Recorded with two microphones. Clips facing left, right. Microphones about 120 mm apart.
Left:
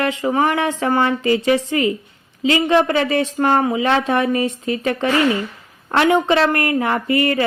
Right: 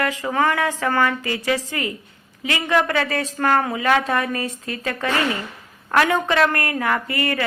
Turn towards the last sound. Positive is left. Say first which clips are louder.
# left 5 dB
turn(degrees=20)  # may be behind; listen again after turning